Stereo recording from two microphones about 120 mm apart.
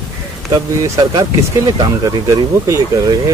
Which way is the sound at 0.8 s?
30° right (ahead or behind).